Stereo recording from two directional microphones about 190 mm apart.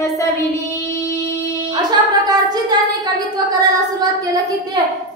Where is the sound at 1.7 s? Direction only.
20° right (ahead or behind).